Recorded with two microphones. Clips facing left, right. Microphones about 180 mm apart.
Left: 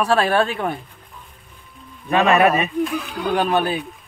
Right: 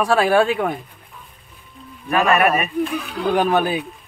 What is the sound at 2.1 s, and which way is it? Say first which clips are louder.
Speech: left 1 dB; 25° left (ahead or behind).